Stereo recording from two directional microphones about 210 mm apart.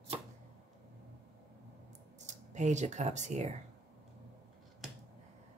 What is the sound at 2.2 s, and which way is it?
Speech, 35° right (ahead or behind).